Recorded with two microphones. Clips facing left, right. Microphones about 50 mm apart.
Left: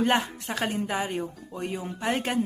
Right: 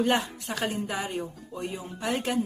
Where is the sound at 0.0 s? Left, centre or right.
Left.